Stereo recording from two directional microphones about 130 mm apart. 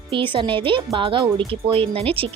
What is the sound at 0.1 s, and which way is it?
Speech, 40° right (ahead or behind).